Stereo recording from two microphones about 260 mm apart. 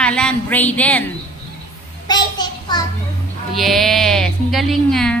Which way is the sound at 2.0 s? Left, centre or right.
Centre.